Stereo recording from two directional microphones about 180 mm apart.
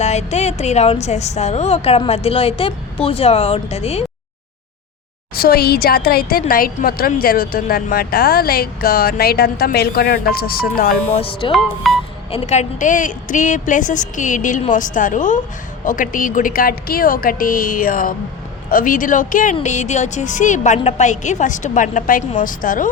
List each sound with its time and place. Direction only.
0.0 s a woman's voice: 40° left (ahead or behind)
5.3 s speech: 55° left (ahead or behind)
11.2 s speech: 30° left (ahead or behind)
11.5 s speech: centre (ahead or behind)
12.3 s a woman's voice: 40° left (ahead or behind)